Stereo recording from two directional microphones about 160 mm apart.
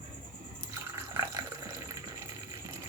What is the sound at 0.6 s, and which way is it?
Water, 15° right (ahead or behind).